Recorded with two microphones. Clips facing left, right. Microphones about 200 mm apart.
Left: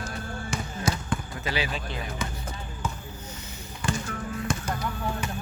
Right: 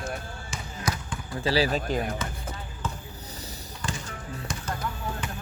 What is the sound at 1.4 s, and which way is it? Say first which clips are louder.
Speech: right 6 dB; 35° right (ahead or behind).